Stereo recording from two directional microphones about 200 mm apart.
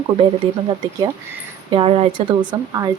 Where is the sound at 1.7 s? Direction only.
25° right (ahead or behind).